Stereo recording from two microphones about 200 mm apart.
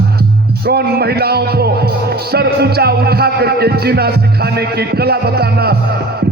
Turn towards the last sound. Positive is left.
turn(degrees=-50)  # may be behind; listen again after turning